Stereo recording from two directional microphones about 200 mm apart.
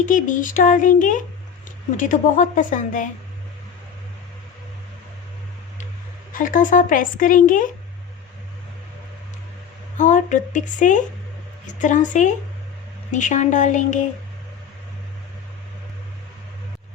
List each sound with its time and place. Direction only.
0.0 s speech: 40° left (ahead or behind)
6.3 s speech: 40° left (ahead or behind)
10.0 s a woman's voice: 40° left (ahead or behind)